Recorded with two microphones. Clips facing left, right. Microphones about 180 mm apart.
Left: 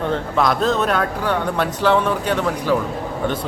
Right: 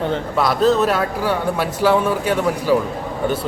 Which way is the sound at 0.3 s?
5° right (ahead or behind).